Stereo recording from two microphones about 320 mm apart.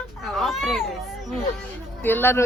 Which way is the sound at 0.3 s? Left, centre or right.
Centre.